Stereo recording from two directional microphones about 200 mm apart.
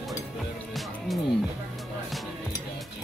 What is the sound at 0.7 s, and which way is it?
Music, centre (ahead or behind).